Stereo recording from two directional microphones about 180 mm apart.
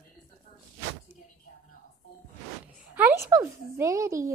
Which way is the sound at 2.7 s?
10° right (ahead or behind).